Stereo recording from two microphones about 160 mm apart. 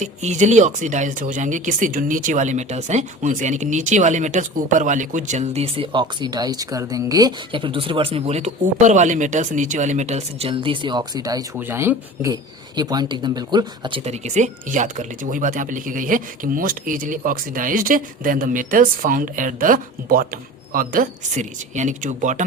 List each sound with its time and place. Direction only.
0.0 s speech: 45° right (ahead or behind); by 11.4 s 25° right (ahead or behind)
11.5 s speech: 15° right (ahead or behind); by 22.4 s 50° right (ahead or behind)